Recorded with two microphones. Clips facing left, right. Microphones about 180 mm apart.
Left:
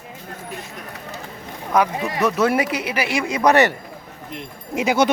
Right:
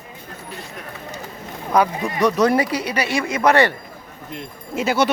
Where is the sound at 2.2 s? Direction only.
5° left (ahead or behind).